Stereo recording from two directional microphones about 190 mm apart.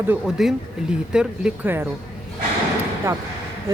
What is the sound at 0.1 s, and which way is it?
Speech, 5° right (ahead or behind).